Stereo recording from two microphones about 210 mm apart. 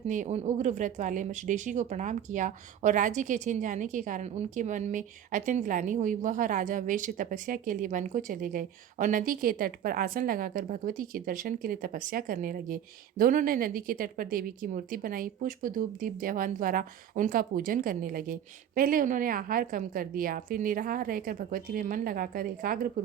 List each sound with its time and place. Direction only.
0.1 s speech: 35° right (ahead or behind)